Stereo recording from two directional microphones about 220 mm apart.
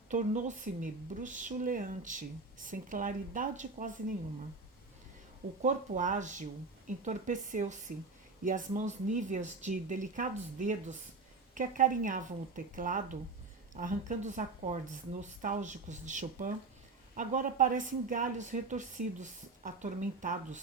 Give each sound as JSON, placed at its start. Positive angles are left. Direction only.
{"t": 0.1, "sound": "a woman's voice", "side_deg": -35}
{"t": 5.6, "sound": "a woman's voice", "side_deg": -35}